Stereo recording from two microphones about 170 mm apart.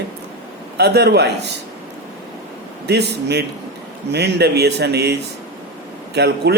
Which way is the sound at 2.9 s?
80° right.